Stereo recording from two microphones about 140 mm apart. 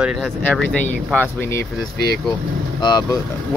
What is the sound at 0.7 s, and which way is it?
Speech, 10° left (ahead or behind).